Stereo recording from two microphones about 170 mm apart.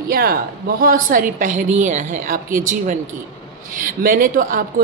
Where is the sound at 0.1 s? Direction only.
65° right (ahead or behind).